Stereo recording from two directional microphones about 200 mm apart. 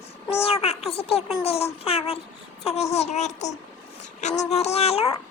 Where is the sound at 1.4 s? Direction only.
30° left (ahead or behind).